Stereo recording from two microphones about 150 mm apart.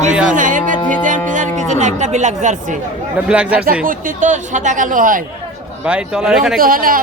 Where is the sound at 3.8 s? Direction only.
55° right (ahead or behind).